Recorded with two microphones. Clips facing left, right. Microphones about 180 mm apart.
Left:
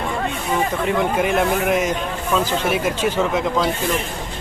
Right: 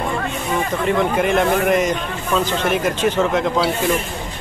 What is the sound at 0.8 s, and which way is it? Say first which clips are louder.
A man's voice: right 4 dB; 5° left (ahead or behind).